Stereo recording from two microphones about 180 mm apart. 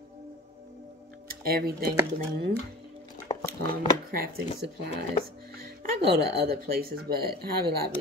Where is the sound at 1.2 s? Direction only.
60° right (ahead or behind).